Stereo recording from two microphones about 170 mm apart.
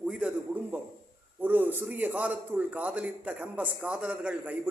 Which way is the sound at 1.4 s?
10° right (ahead or behind).